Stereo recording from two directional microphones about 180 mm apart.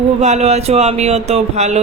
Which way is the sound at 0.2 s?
40° right (ahead or behind).